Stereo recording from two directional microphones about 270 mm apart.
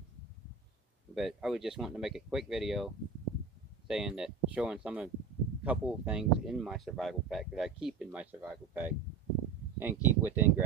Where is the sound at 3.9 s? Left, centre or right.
Centre.